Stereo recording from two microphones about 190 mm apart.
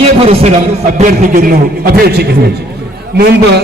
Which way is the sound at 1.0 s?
45° right (ahead or behind).